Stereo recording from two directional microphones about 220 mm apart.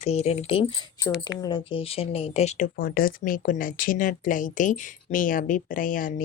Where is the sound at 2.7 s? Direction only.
40° left (ahead or behind).